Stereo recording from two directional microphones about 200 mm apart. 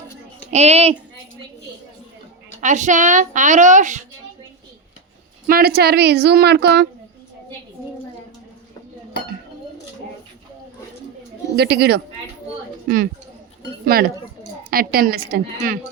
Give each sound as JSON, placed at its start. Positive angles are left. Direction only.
{"t": 0.5, "sound": "a woman's voice", "side_deg": -30}
{"t": 2.6, "sound": "a woman's voice", "side_deg": -40}
{"t": 5.5, "sound": "a woman's voice", "side_deg": -50}
{"t": 11.5, "sound": "a woman's voice", "side_deg": -55}
{"t": 13.9, "sound": "a woman's voice", "side_deg": -50}